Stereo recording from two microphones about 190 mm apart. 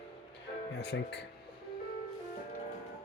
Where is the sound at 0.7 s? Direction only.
65° left (ahead or behind).